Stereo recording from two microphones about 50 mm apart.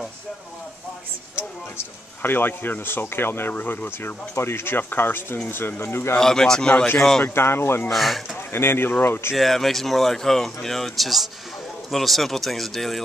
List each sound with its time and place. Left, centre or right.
2.2 s speech: left
3.5 s speech: left
4.4 s speech: left
6.1 s speech: centre
7.2 s speech: left
7.9 s speech: centre
8.5 s speech: left
9.4 s speech: centre